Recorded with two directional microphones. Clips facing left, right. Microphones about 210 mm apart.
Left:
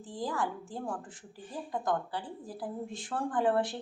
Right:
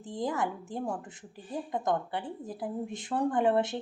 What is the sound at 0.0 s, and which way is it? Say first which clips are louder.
A woman's voice: right 3 dB; 20° right (ahead or behind).